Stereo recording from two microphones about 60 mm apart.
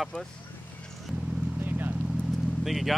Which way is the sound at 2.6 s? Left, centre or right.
Centre.